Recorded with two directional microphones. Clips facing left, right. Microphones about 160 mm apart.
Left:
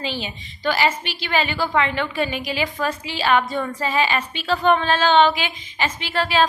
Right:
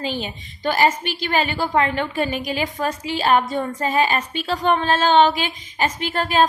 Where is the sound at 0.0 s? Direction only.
45° right (ahead or behind).